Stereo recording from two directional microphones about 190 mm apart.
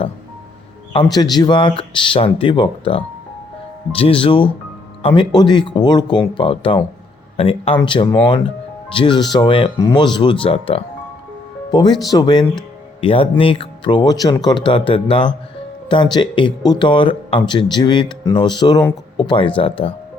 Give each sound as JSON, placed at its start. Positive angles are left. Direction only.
{"t": 1.1, "sound": "speech", "side_deg": 20}